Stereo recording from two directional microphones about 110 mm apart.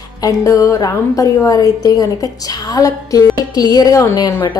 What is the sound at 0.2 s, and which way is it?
A woman's voice, 30° left (ahead or behind).